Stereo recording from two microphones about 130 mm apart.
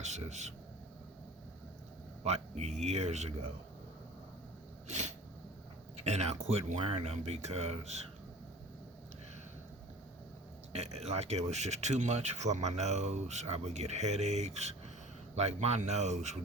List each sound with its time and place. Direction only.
0.0 s speech: 60° right (ahead or behind)
2.2 s speech: 55° right (ahead or behind)
4.9 s sneeze: 65° right (ahead or behind)
6.1 s speech: 55° right (ahead or behind)
10.7 s speech: 55° right (ahead or behind)